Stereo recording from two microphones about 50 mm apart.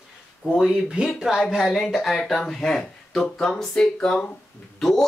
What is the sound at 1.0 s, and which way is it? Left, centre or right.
Speech, right.